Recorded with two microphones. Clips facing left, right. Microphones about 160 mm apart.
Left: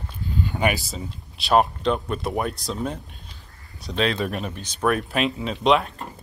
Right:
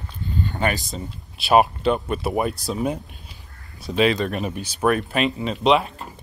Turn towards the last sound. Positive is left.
turn(degrees=0)  # may be behind; listen again after turning